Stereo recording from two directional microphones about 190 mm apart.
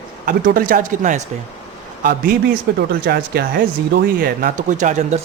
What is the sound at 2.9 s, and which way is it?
Speech, 50° right (ahead or behind).